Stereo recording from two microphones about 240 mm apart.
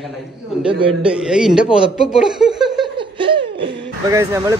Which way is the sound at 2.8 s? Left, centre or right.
Centre.